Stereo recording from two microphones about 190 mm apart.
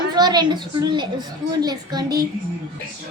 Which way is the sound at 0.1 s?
20° right (ahead or behind).